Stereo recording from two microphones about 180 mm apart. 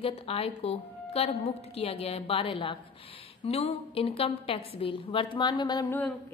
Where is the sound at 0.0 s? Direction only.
30° left (ahead or behind).